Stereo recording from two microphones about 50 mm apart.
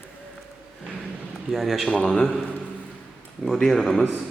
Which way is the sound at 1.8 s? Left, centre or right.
Centre.